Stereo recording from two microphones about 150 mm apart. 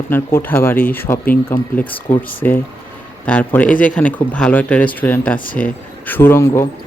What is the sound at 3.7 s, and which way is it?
Speech, 60° left (ahead or behind).